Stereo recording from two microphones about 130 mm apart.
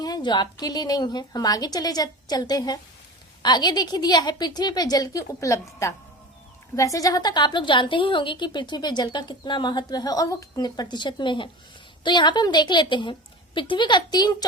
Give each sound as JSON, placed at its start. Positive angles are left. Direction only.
{"t": 0.0, "sound": "a woman's voice", "side_deg": 35}